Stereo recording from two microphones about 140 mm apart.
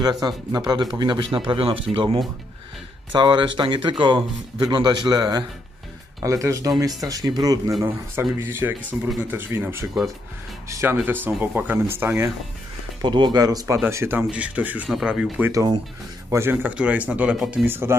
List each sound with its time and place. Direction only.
0.0 s speech: 30° right (ahead or behind)
3.1 s speech: 35° right (ahead or behind)
7.8 s speech: 15° right (ahead or behind)
13.0 s speech: 30° right (ahead or behind); by 15.4 s 5° right (ahead or behind)
15.4 s speech: 25° right (ahead or behind); by 17.6 s 5° right (ahead or behind)
17.6 s speech: 15° right (ahead or behind)